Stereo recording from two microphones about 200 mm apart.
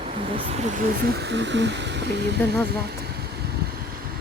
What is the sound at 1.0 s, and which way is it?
Speech, 55° right (ahead or behind).